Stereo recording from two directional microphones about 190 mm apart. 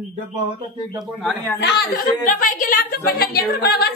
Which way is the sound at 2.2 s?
45° left (ahead or behind).